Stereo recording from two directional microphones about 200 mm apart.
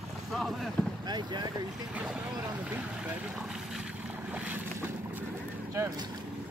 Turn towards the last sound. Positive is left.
turn(degrees=-20)  # may be behind; listen again after turning